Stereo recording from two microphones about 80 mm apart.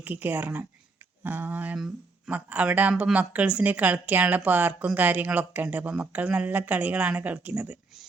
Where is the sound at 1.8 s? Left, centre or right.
Centre.